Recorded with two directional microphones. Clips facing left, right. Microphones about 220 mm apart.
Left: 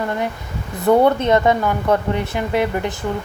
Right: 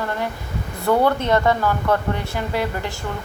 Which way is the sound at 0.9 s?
20° left (ahead or behind).